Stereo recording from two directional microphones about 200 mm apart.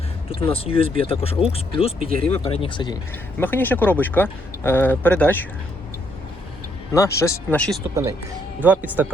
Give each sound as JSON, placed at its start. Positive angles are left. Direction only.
{"t": 0.3, "sound": "speech", "side_deg": 25}
{"t": 3.4, "sound": "speech", "side_deg": 10}
{"t": 6.9, "sound": "speech", "side_deg": 15}
{"t": 8.6, "sound": "speech", "side_deg": -10}